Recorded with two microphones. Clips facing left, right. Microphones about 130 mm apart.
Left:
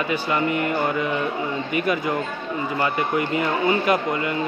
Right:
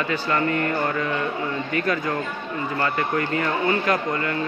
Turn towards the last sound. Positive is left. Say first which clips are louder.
# left 2 dB
turn(degrees=15)  # may be behind; listen again after turning